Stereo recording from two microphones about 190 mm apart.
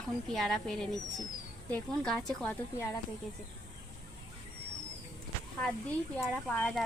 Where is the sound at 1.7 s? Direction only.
10° left (ahead or behind).